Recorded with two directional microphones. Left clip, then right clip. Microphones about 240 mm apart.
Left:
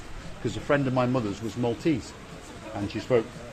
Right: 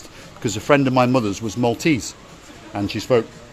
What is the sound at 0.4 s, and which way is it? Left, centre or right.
A man's voice, right.